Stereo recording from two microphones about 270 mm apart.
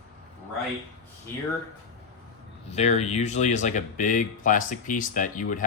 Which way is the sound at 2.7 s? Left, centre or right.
Left.